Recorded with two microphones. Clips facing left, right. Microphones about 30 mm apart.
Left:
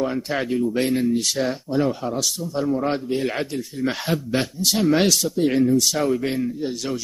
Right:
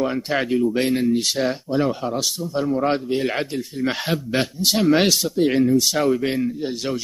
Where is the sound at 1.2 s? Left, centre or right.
Centre.